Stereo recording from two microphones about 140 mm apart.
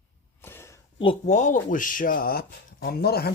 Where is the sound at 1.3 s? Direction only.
60° left (ahead or behind); by 3.0 s 90° left.